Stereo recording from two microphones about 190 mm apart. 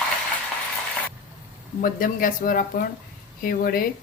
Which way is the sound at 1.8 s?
45° left (ahead or behind).